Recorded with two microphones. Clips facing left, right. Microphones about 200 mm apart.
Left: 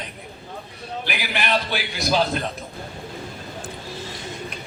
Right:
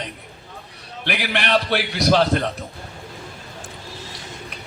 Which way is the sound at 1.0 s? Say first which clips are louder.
Right 4 dB; 70° right (ahead or behind).